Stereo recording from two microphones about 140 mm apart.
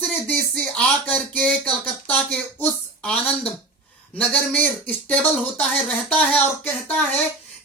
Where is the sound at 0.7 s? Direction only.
10° left (ahead or behind).